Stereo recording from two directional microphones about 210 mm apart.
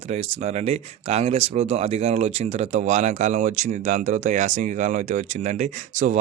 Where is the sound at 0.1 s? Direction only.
30° right (ahead or behind).